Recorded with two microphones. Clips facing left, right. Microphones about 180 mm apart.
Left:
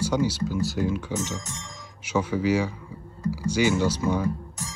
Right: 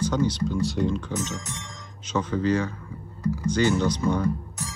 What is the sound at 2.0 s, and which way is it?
Music, 10° left (ahead or behind).